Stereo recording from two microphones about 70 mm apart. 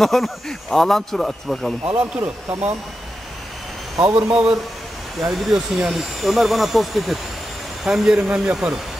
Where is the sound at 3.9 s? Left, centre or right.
Right.